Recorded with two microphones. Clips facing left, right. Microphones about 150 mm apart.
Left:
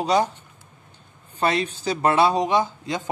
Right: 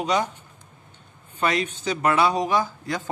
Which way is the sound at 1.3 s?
30° left (ahead or behind).